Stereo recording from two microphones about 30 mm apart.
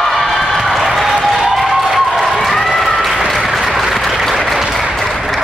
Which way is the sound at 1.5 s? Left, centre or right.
Centre.